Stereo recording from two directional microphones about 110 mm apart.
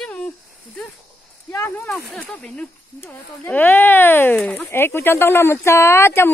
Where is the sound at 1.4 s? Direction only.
25° left (ahead or behind).